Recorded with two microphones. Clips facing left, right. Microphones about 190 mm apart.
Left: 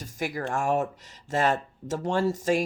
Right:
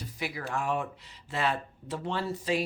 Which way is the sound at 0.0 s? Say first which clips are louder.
Left 5 dB; 45° left (ahead or behind).